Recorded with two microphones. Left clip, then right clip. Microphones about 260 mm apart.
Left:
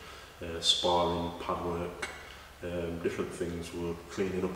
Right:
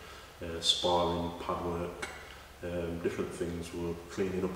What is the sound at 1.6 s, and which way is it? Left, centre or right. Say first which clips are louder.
Speech: left 1 dB; centre.